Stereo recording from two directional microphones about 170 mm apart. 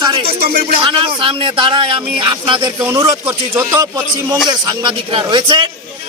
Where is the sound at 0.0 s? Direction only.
30° right (ahead or behind).